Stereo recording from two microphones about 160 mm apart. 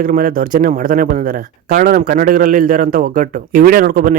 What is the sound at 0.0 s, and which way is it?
Speech, 60° right (ahead or behind).